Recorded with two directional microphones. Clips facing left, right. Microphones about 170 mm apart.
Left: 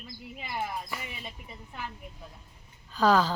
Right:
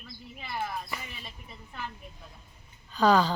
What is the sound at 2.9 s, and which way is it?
Speech, centre (ahead or behind).